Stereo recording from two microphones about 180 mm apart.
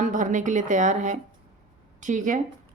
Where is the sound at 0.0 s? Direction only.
45° right (ahead or behind).